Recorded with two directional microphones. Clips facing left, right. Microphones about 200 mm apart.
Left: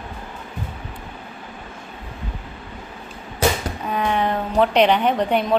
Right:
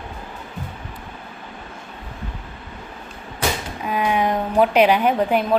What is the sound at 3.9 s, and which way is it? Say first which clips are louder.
A woman's voice: right 1 dB; 10° right (ahead or behind).